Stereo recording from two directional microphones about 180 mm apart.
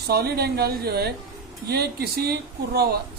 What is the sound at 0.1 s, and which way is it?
A man's voice, 60° right (ahead or behind).